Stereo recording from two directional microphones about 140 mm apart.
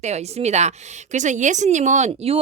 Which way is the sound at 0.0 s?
50° right (ahead or behind).